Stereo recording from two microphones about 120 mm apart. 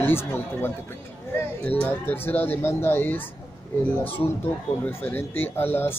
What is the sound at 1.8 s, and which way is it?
Speech, 15° left (ahead or behind).